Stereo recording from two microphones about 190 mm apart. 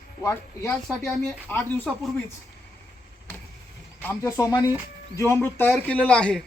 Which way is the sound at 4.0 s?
10° left (ahead or behind).